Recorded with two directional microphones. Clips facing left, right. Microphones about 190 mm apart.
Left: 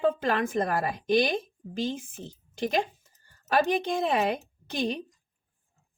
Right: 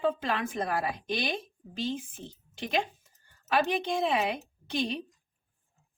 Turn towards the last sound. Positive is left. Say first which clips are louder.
# left 2 dB
turn(degrees=45)  # may be behind; listen again after turning